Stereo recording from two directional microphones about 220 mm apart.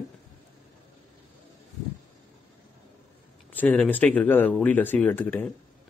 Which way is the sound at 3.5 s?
5° left (ahead or behind).